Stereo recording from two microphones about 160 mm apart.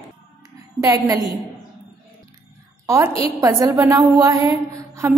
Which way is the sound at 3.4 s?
25° right (ahead or behind).